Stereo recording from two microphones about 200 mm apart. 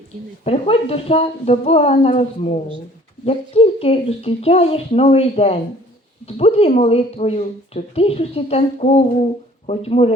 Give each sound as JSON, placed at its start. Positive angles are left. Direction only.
{"t": 0.4, "sound": "speech", "side_deg": 30}